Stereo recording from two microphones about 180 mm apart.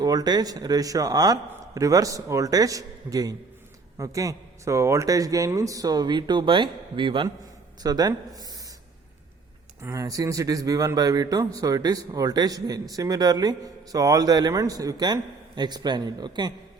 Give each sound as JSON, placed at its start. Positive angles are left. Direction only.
{"t": 0.0, "sound": "speech", "side_deg": -20}
{"t": 9.8, "sound": "speech", "side_deg": -20}